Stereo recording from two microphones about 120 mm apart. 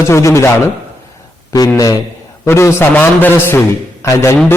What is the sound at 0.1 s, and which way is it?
Speech, 25° left (ahead or behind).